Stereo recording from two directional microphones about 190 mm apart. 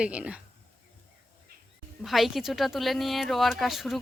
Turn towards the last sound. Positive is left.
turn(degrees=0)  # may be behind; listen again after turning